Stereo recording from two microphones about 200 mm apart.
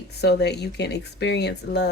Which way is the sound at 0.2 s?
55° left (ahead or behind).